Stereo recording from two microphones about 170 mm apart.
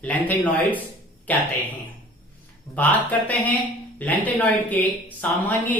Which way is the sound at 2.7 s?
10° left (ahead or behind).